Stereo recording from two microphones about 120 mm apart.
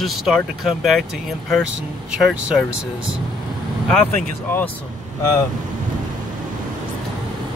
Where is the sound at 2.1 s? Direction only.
5° right (ahead or behind).